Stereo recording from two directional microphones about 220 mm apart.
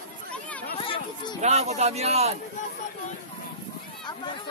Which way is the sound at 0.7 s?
25° left (ahead or behind).